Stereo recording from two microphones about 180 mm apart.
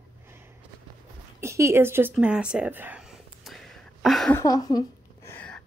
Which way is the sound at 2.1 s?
5° right (ahead or behind).